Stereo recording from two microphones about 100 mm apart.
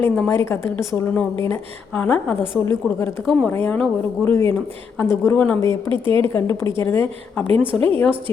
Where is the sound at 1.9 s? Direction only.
15° left (ahead or behind).